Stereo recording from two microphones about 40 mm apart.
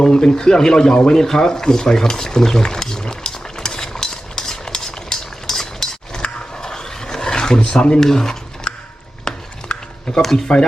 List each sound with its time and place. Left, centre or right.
0.0 s a man's voice: centre
1.1 s a sound: centre
6.2 s roar: centre
7.6 s speech: left
8.0 s a man's voice: centre
8.7 s a sound: left
10.2 s speech: centre